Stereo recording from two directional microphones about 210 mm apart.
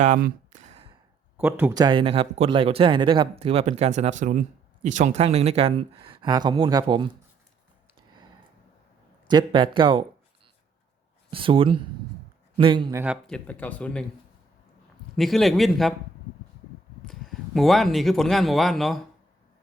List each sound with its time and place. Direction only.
0.0 s a sound: 40° right (ahead or behind)
1.4 s speech: 10° right (ahead or behind)
1.8 s speech: 25° right (ahead or behind)
9.2 s speech: 20° right (ahead or behind)
11.3 s speech: 25° right (ahead or behind)
13.2 s speech: 5° left (ahead or behind)
15.1 s a man's voice: centre (ahead or behind)
17.1 s speech: centre (ahead or behind)